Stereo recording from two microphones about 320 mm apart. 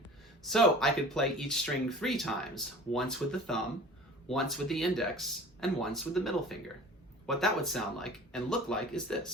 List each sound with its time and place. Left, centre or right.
0.4 s speech: centre